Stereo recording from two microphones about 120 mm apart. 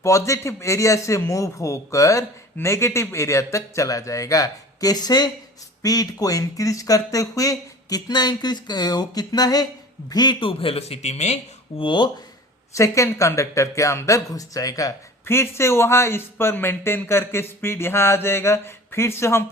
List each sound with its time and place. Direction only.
0.0 s a man's voice: 25° left (ahead or behind); by 11.3 s 65° left (ahead or behind)
11.8 s speech: 40° left (ahead or behind)
12.7 s speech: 25° left (ahead or behind)